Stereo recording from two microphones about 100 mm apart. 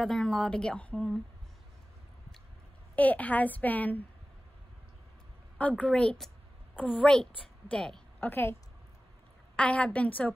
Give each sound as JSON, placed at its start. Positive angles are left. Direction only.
{"t": 0.0, "sound": "a woman's voice", "side_deg": 5}
{"t": 3.0, "sound": "a woman's voice", "side_deg": 15}
{"t": 5.6, "sound": "a woman's voice", "side_deg": 15}
{"t": 8.3, "sound": "a woman's voice", "side_deg": 20}
{"t": 9.6, "sound": "a woman's voice", "side_deg": 10}